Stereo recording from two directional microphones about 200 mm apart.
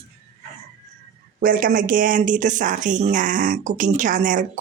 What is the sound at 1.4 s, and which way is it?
Speech, 45° right (ahead or behind).